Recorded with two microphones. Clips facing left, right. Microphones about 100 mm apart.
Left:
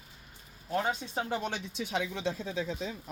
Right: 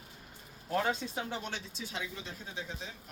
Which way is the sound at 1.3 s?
55° left (ahead or behind).